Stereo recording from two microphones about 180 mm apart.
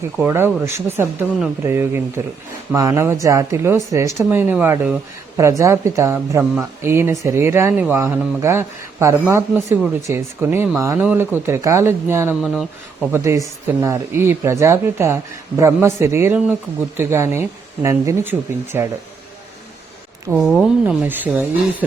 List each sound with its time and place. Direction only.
0.2 s speech: 10° right (ahead or behind)
12.3 s speech: centre (ahead or behind)
13.1 s speech: 15° right (ahead or behind)
20.3 s speech: 5° right (ahead or behind)